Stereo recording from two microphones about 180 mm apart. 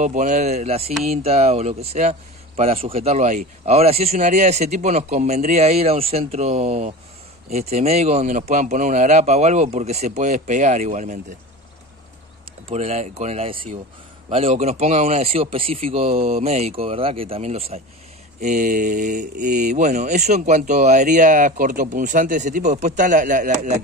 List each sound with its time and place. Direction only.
0.0 s speech: 45° right (ahead or behind)
12.6 s speech: 35° right (ahead or behind)